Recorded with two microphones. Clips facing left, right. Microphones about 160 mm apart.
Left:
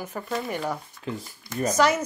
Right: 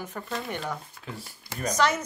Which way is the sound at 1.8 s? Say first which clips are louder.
Left 3 dB; 10° left (ahead or behind).